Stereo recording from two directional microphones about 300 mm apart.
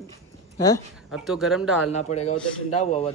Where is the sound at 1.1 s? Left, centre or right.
Centre.